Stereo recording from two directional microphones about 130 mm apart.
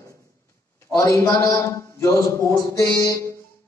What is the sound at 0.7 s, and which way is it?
A man's voice, 25° left (ahead or behind).